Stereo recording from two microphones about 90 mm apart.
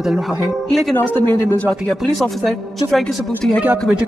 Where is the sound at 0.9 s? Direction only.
20° left (ahead or behind).